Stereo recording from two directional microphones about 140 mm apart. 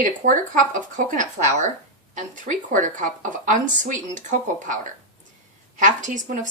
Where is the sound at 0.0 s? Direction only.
70° right (ahead or behind).